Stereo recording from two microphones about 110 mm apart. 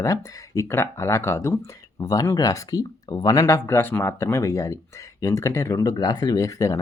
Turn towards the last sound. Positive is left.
turn(degrees=30)  # may be behind; listen again after turning